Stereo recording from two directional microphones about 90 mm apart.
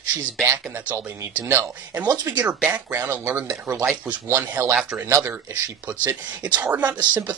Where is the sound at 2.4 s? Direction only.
20° right (ahead or behind).